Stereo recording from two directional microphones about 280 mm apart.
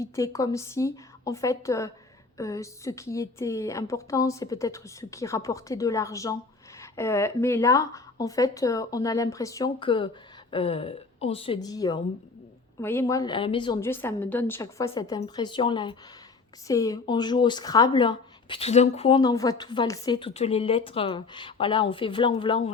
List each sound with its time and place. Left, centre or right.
0.0 s a woman's voice: centre